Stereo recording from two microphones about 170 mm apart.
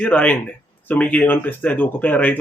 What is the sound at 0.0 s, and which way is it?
Speech, 10° left (ahead or behind).